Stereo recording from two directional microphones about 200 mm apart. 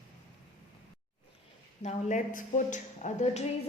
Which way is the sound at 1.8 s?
35° left (ahead or behind).